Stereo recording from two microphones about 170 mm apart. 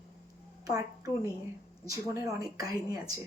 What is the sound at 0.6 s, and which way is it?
A woman's voice, 20° right (ahead or behind).